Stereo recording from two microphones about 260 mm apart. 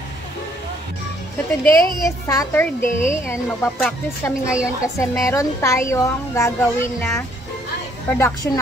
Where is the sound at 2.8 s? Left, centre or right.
Left.